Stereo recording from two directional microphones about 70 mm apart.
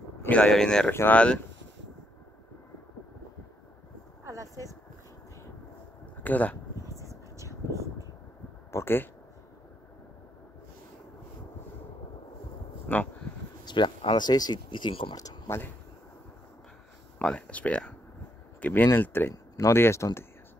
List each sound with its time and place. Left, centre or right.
0.3 s speech: centre
4.2 s a sound: right
6.2 s speech: left
6.9 s vehicle: right
8.7 s speech: left
12.8 s speech: left
13.7 s speech: left
17.2 s speech: centre
18.6 s speech: left